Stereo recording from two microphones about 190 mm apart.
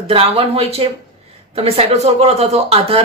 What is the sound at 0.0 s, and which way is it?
Speech, 30° right (ahead or behind).